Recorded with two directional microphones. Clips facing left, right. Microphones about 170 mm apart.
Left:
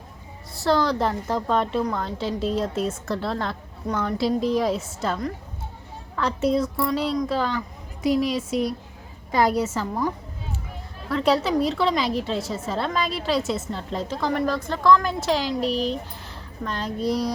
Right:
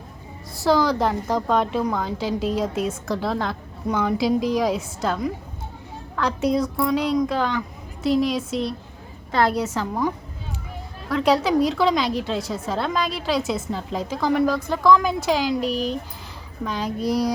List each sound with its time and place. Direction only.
0.5 s a woman's voice: centre (ahead or behind)
11.1 s a woman's voice: centre (ahead or behind)
17.0 s child singing: 45° right (ahead or behind)